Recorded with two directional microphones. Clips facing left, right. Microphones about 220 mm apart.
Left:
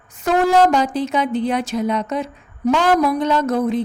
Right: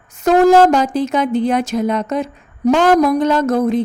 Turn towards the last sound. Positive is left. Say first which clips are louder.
# right 3 dB
turn(degrees=-45)  # may be behind; listen again after turning